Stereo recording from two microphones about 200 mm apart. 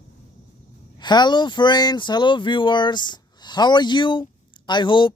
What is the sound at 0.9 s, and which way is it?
Speech, 20° left (ahead or behind).